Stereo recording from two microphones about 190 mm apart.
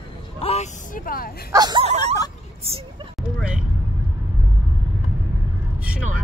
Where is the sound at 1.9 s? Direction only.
35° right (ahead or behind).